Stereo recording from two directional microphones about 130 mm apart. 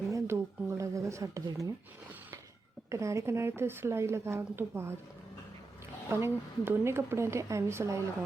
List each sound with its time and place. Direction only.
0.1 s a woman's voice: 20° right (ahead or behind)
2.9 s a woman's voice: 25° right (ahead or behind)
6.1 s a woman's voice: 20° right (ahead or behind)